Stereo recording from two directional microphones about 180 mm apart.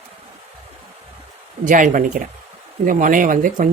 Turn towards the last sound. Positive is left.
turn(degrees=-50)  # may be behind; listen again after turning